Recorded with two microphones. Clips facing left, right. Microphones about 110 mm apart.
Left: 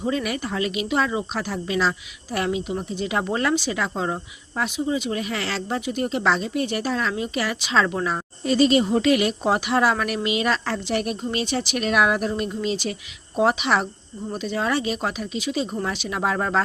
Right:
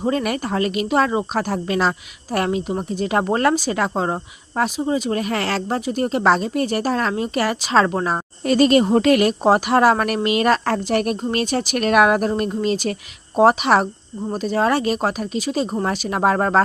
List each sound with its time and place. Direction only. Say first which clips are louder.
0.0 s speech: right 4 dB; 45° right (ahead or behind)
8.4 s speech: right 3 dB; 50° right (ahead or behind)